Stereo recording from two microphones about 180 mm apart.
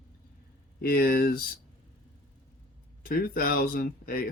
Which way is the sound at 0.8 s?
55° left (ahead or behind).